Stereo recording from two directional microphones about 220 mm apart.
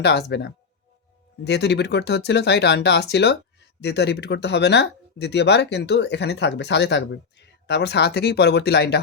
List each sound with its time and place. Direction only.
0.0 s speech: 50° left (ahead or behind)